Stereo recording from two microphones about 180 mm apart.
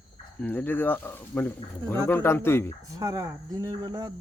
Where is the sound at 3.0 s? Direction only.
20° right (ahead or behind).